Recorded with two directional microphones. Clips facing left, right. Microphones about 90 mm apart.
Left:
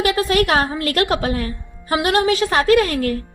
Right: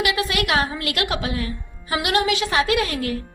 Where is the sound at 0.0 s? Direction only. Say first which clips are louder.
Left 5 dB; 40° left (ahead or behind).